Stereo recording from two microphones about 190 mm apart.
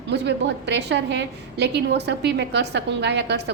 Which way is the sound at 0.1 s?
65° right (ahead or behind).